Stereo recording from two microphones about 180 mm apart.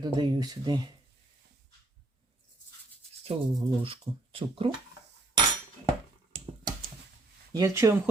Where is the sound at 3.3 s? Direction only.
35° right (ahead or behind).